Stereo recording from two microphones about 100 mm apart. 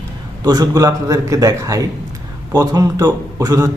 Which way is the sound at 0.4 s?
40° right (ahead or behind).